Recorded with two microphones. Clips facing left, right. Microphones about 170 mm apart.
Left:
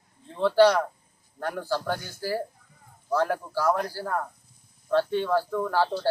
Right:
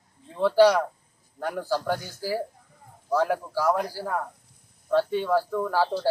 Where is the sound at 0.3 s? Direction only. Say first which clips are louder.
Right 1 dB; 5° right (ahead or behind).